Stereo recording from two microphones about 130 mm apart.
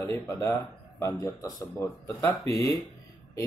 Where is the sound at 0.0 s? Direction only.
25° left (ahead or behind).